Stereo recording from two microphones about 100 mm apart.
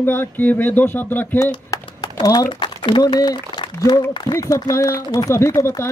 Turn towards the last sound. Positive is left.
turn(degrees=30)  # may be behind; listen again after turning